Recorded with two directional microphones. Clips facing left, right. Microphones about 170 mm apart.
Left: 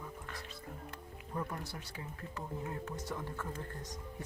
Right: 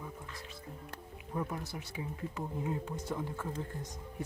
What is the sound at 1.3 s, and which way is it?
Speech, 10° right (ahead or behind).